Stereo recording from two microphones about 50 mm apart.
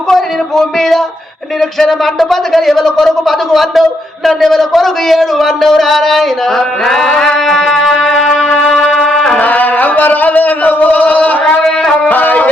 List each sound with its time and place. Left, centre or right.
0.1 s speech: centre
6.8 s music: centre
9.4 s singing: left
12.0 s music: left